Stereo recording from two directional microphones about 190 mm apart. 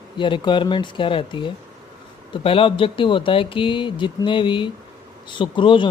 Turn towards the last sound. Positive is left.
turn(degrees=25)  # may be behind; listen again after turning